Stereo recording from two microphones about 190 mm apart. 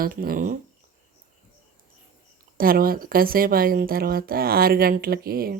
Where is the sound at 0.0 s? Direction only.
50° right (ahead or behind).